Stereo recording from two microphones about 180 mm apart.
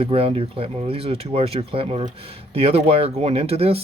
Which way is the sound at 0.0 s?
30° right (ahead or behind).